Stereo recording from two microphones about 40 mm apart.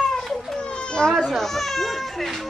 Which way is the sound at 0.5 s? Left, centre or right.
Left.